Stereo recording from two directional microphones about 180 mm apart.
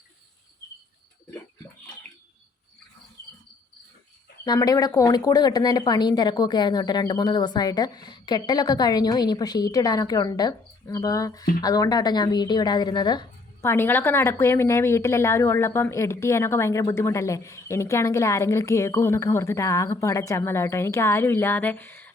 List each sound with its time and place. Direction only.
4.4 s a woman's voice: 20° left (ahead or behind)